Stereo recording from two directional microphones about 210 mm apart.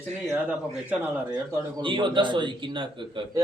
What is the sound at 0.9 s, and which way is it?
A man's voice, 10° right (ahead or behind).